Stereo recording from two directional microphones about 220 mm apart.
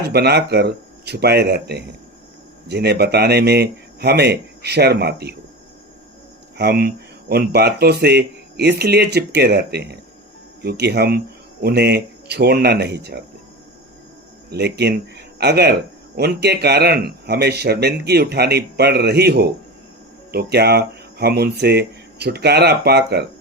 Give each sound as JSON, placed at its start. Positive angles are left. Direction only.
{"t": 0.0, "sound": "speech", "side_deg": -45}
{"t": 6.6, "sound": "speech", "side_deg": -45}
{"t": 14.5, "sound": "speech", "side_deg": -50}